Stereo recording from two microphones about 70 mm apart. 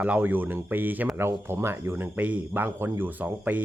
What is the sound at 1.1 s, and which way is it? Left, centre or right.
Speech, right.